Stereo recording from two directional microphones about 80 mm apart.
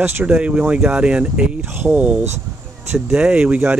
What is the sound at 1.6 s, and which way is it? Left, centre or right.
Speech, right.